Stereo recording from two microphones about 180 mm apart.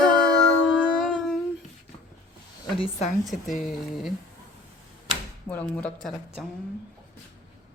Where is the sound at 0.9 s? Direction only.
5° left (ahead or behind).